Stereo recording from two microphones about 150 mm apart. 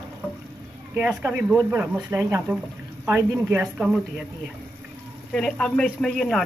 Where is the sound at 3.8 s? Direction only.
5° right (ahead or behind).